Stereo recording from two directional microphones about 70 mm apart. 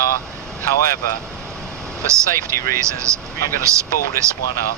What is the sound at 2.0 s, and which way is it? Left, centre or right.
Speech, right.